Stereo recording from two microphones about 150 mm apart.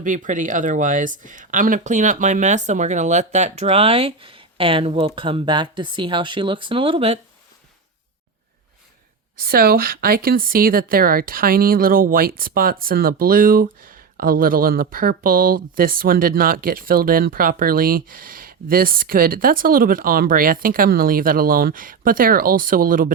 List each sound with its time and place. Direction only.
0.0 s speech: 60° right (ahead or behind); by 7.2 s 40° right (ahead or behind)
9.4 s speech: 85° right; by 23.1 s 70° right (ahead or behind)